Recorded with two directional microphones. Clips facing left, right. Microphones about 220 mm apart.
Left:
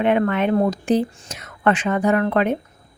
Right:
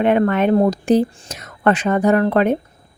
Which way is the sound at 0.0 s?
40° right (ahead or behind).